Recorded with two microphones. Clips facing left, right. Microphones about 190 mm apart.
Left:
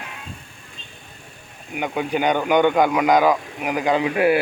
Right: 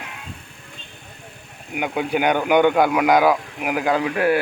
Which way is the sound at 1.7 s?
10° right (ahead or behind).